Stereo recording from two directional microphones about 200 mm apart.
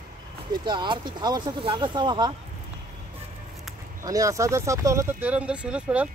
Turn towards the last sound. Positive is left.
turn(degrees=-5)  # may be behind; listen again after turning